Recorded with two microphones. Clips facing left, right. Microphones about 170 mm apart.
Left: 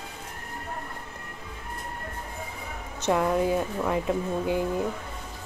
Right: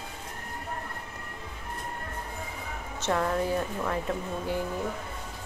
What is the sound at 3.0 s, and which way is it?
A woman's voice, 15° left (ahead or behind).